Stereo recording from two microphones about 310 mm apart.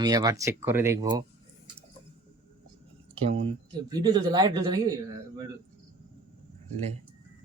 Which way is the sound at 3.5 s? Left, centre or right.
Centre.